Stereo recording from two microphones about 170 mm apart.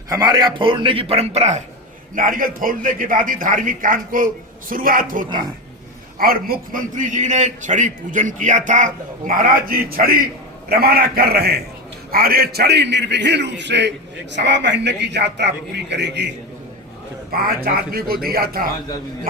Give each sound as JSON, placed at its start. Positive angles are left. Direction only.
{"t": 0.1, "sound": "a man's voice", "side_deg": -25}
{"t": 2.1, "sound": "a man's voice", "side_deg": -55}
{"t": 17.3, "sound": "speech", "side_deg": -60}